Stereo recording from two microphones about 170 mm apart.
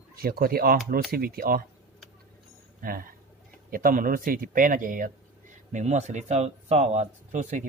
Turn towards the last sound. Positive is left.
turn(degrees=-45)  # may be behind; listen again after turning